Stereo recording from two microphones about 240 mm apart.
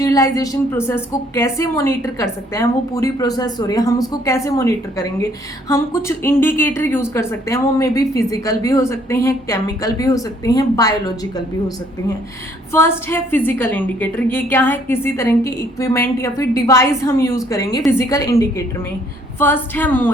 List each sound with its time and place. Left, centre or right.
0.0 s a woman's voice: centre
12.7 s a woman's voice: centre